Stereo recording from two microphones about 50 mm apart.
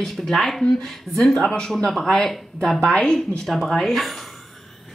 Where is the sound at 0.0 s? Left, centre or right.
Centre.